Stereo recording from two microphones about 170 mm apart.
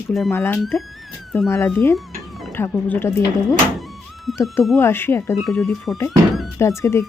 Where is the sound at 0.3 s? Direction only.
15° left (ahead or behind).